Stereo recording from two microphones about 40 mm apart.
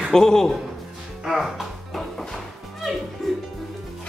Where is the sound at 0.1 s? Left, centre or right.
Centre.